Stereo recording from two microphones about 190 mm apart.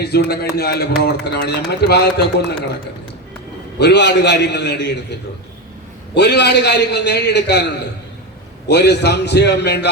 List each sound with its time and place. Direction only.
0.0 s a man's voice: 55° left (ahead or behind)
3.8 s a man's voice: 60° left (ahead or behind)
6.1 s a man's voice: 60° left (ahead or behind)
8.6 s a man's voice: 60° left (ahead or behind)